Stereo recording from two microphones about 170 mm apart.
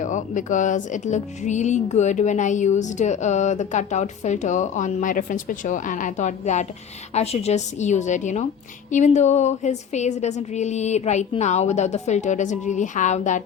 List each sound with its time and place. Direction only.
0.0 s music: 45° left (ahead or behind)